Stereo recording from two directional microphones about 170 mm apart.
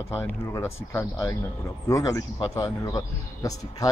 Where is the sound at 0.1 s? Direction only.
15° left (ahead or behind).